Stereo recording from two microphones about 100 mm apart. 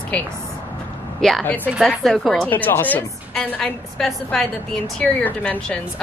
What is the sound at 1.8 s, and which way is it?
Speech, centre (ahead or behind).